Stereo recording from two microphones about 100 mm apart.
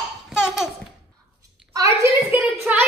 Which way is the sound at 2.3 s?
15° right (ahead or behind).